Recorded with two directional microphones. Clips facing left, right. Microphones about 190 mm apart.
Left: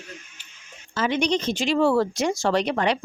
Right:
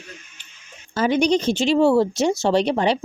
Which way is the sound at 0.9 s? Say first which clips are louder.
Right 5 dB; 35° right (ahead or behind).